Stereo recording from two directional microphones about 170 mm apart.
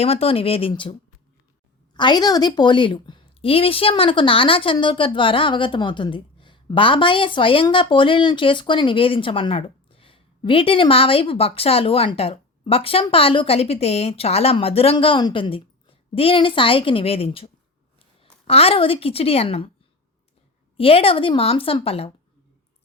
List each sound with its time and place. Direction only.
0.0 s a woman's voice: 35° left (ahead or behind)
20.7 s a woman's voice: 35° left (ahead or behind)